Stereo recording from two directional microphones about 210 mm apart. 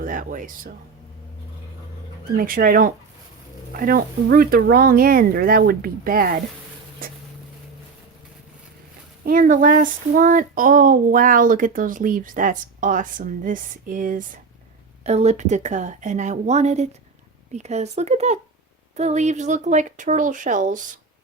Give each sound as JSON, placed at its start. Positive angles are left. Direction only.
{"t": 0.0, "sound": "speech", "side_deg": -40}
{"t": 2.3, "sound": "speech", "side_deg": -45}
{"t": 9.2, "sound": "a sound", "side_deg": -40}